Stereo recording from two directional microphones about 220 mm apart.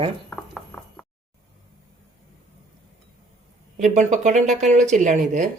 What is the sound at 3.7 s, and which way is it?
Speech, 35° right (ahead or behind).